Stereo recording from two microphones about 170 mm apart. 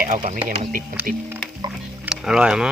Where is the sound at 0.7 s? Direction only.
55° right (ahead or behind).